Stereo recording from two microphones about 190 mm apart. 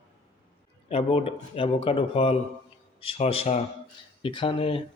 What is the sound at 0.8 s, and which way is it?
Speech, 30° left (ahead or behind).